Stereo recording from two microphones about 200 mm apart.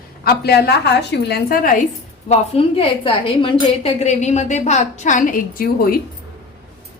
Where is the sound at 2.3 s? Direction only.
30° left (ahead or behind); by 6.0 s 50° left (ahead or behind).